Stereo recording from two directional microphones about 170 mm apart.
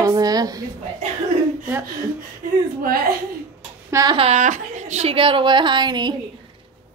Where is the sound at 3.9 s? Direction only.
25° right (ahead or behind).